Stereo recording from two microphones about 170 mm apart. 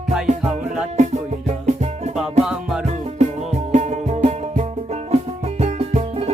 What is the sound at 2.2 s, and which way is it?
Music, centre (ahead or behind).